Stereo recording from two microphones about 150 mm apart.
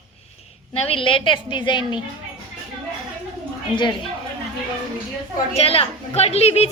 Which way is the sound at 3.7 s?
30° left (ahead or behind).